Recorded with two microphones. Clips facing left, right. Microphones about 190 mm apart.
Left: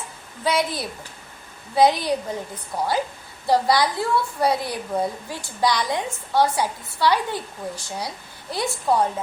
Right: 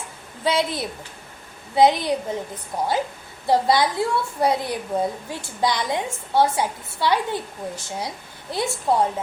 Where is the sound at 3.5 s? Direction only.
20° right (ahead or behind).